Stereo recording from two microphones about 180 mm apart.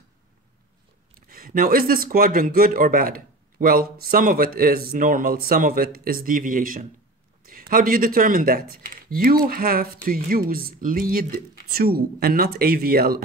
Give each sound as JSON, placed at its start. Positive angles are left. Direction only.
{"t": 1.1, "sound": "speech", "side_deg": -50}